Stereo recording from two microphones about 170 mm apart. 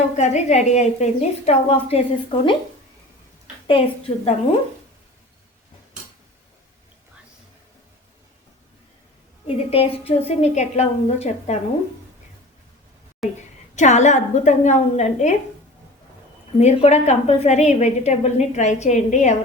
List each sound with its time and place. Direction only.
0.1 s a woman's voice: 45° left (ahead or behind)
3.7 s a woman's voice: 35° left (ahead or behind)
9.5 s a woman's voice: 35° left (ahead or behind)
13.2 s a woman's voice: centre (ahead or behind)
13.7 s a woman's voice: 45° left (ahead or behind)
16.6 s a woman's voice: 40° left (ahead or behind)